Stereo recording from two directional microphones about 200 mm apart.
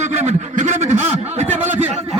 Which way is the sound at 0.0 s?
35° right (ahead or behind).